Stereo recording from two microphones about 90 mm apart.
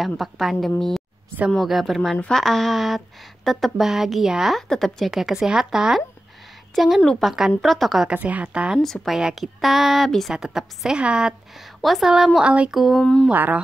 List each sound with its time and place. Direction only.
0.0 s a woman's voice: centre (ahead or behind)
8.1 s a woman's voice: 15° right (ahead or behind)
8.7 s a woman's voice: 5° left (ahead or behind)
13.3 s music: 20° right (ahead or behind)